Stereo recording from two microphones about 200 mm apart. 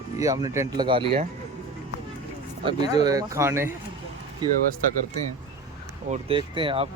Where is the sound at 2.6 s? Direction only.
20° right (ahead or behind).